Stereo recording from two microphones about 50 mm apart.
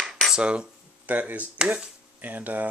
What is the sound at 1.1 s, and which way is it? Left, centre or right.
Speech, right.